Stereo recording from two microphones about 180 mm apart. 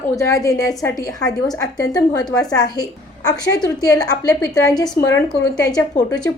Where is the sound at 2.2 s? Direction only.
5° left (ahead or behind).